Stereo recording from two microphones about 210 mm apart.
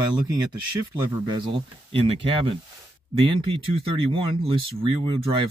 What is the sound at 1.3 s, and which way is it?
Speech, 25° right (ahead or behind).